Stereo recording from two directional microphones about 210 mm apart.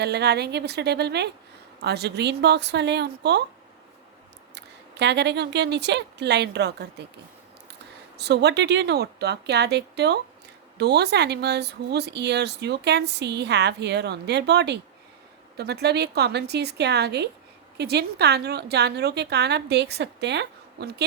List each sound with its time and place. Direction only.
0.0 s speech: 50° right (ahead or behind)
4.5 s speech: 55° right (ahead or behind)
8.2 s speech: 55° right (ahead or behind)